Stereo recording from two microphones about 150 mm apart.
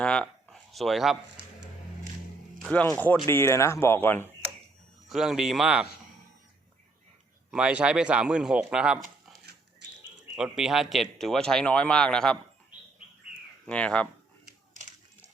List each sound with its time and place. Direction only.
0.0 s a sound: 5° left (ahead or behind)
2.6 s speech: 5° left (ahead or behind)
3.2 s speech: 15° left (ahead or behind)
5.0 s speech: centre (ahead or behind)
7.5 s speech: 5° right (ahead or behind)
13.7 s speech: 10° left (ahead or behind)